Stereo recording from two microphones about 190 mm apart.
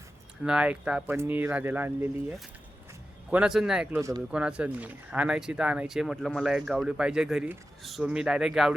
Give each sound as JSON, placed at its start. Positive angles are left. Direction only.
{"t": 0.4, "sound": "speech", "side_deg": -5}
{"t": 3.2, "sound": "speech", "side_deg": -5}